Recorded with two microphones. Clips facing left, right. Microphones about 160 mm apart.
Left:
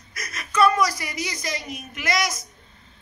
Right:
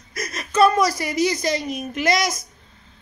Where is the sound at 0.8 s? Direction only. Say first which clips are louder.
Right 5 dB; 25° right (ahead or behind).